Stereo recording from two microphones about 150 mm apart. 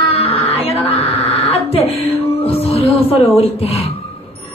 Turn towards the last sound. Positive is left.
turn(degrees=40)  # may be behind; listen again after turning